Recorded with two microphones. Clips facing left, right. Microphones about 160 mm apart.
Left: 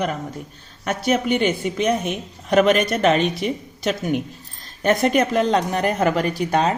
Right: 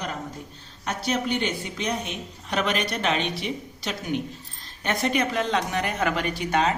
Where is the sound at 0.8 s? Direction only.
50° left (ahead or behind).